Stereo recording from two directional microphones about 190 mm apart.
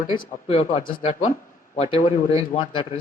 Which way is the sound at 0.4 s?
30° left (ahead or behind).